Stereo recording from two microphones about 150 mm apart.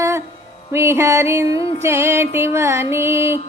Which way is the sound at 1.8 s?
20° right (ahead or behind).